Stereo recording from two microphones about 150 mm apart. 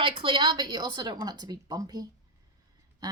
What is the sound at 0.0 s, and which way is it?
A woman's voice, 35° right (ahead or behind).